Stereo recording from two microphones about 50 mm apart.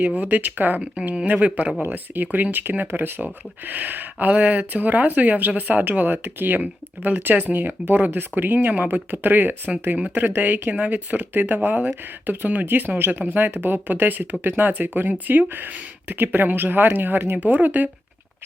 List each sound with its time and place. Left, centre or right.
0.2 s speech: right
1.9 s speech: right